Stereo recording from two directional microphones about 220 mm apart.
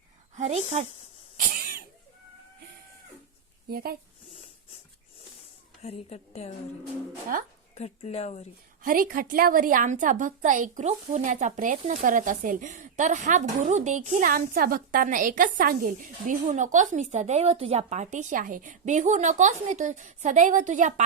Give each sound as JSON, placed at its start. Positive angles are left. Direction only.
{"t": 0.3, "sound": "a sound", "side_deg": -30}
{"t": 1.4, "sound": "cough", "side_deg": -40}
{"t": 3.7, "sound": "speech", "side_deg": -45}
{"t": 5.8, "sound": "a woman's voice", "side_deg": 30}
{"t": 7.8, "sound": "a woman's voice", "side_deg": 30}
{"t": 8.8, "sound": "a woman's voice", "side_deg": -40}